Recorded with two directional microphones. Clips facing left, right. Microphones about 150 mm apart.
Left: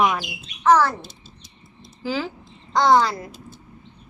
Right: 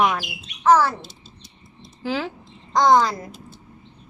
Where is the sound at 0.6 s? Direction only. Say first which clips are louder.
Even; 10° right (ahead or behind).